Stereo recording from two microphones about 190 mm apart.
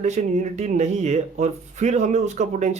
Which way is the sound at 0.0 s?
35° right (ahead or behind).